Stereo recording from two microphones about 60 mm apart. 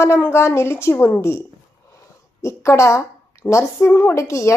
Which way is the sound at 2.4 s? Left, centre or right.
Left.